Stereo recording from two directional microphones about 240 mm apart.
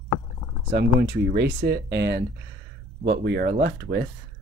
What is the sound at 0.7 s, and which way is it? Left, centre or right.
Speech, right.